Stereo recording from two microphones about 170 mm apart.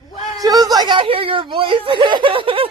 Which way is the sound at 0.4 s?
20° right (ahead or behind).